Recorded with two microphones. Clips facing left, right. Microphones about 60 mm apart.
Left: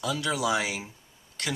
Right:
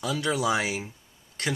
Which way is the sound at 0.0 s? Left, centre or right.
Right.